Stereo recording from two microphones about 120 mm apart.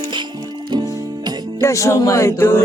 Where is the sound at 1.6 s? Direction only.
25° left (ahead or behind).